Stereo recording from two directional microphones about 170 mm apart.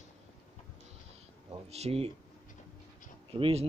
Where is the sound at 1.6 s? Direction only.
40° right (ahead or behind).